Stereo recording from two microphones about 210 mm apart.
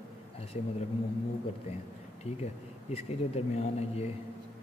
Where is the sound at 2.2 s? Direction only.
30° left (ahead or behind).